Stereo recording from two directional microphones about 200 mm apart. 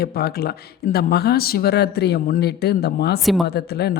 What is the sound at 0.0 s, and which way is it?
Speech, 50° left (ahead or behind).